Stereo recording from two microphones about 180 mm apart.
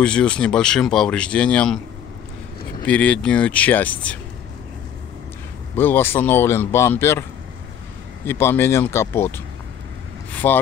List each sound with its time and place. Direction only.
0.0 s speech: 5° left (ahead or behind)
2.9 s speech: 5° left (ahead or behind)
5.8 s speech: 10° left (ahead or behind)
8.3 s speech: 15° left (ahead or behind)
10.3 s vehicle: 10° left (ahead or behind)